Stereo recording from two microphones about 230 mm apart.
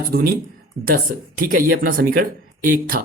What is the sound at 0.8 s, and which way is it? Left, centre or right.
Speech, right.